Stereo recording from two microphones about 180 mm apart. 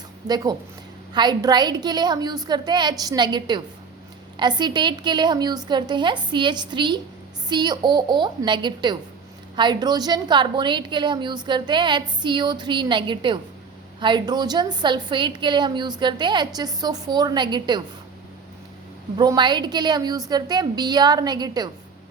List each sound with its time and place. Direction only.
0.3 s a woman's voice: 20° right (ahead or behind)
19.1 s a woman's voice: 25° right (ahead or behind)